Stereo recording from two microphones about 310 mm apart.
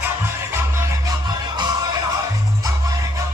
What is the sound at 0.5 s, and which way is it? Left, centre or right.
Music, centre.